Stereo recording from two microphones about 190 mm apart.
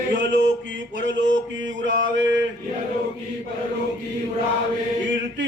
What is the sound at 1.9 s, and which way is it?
Mantra, 70° right (ahead or behind).